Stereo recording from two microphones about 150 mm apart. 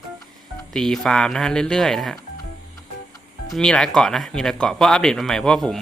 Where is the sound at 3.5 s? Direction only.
5° left (ahead or behind).